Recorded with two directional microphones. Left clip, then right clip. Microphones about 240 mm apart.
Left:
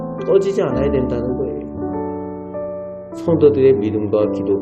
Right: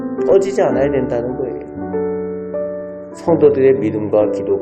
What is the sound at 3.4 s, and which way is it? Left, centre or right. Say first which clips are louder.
Speech: right 1 dB; left.